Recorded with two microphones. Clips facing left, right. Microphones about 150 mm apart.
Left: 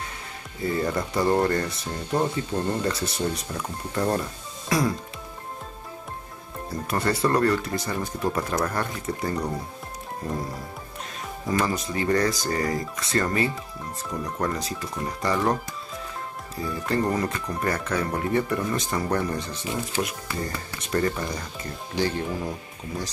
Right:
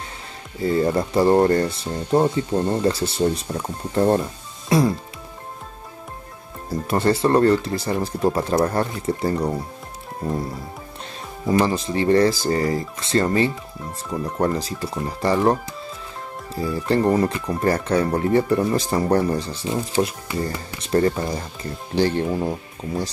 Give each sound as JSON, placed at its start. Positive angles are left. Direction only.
{"t": 0.7, "sound": "speech", "side_deg": -30}
{"t": 6.9, "sound": "speech", "side_deg": -25}
{"t": 11.5, "sound": "speech", "side_deg": -30}
{"t": 16.5, "sound": "speech", "side_deg": -30}